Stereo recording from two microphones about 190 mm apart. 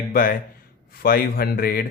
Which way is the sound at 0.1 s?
50° left (ahead or behind).